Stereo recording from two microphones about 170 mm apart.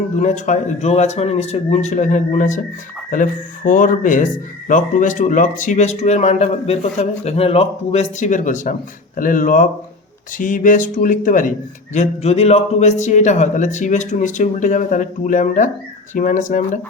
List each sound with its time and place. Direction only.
0.2 s speech: 45° left (ahead or behind)
11.9 s speech: 40° left (ahead or behind)